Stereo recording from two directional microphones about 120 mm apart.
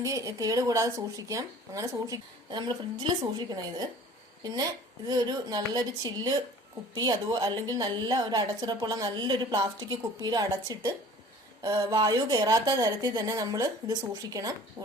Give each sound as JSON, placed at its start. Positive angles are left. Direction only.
{"t": 0.0, "sound": "a woman's voice", "side_deg": -25}